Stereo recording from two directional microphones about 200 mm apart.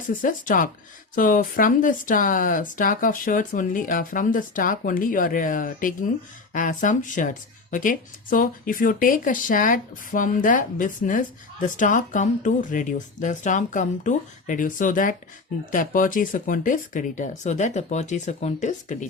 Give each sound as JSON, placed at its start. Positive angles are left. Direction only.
{"t": 0.1, "sound": "speech", "side_deg": 40}